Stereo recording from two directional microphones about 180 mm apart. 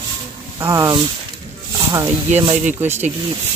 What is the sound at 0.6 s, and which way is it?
Speech, 20° right (ahead or behind).